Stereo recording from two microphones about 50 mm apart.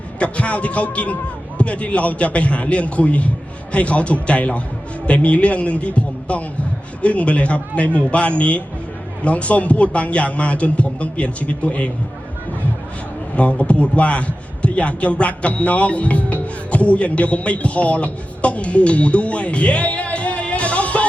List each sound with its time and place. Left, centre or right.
0.2 s a man's voice: left
13.3 s a man's voice: left